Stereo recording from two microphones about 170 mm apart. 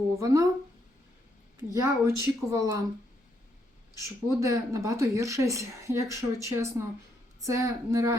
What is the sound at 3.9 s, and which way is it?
A woman's voice, 20° right (ahead or behind).